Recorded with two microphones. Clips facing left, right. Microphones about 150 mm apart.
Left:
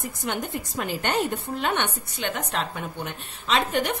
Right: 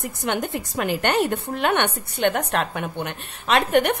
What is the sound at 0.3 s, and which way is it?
A woman's voice, 70° right (ahead or behind).